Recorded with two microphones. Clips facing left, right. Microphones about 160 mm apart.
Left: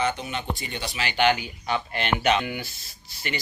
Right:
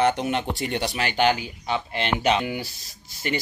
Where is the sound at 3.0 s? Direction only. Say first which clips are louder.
Right 5 dB; 45° right (ahead or behind).